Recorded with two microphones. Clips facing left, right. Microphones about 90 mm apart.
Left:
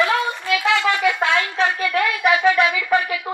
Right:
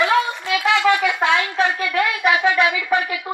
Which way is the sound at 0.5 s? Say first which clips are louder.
Right 3 dB; 20° right (ahead or behind).